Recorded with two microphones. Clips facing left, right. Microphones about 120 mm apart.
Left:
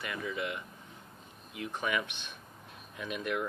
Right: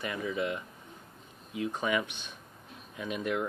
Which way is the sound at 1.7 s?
20° right (ahead or behind).